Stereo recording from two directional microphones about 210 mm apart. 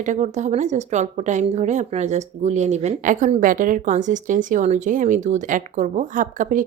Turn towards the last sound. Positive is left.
turn(degrees=-35)  # may be behind; listen again after turning